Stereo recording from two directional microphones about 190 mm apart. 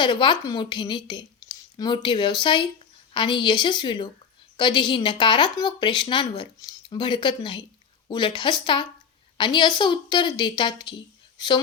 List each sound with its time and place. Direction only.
0.0 s speech: 25° left (ahead or behind)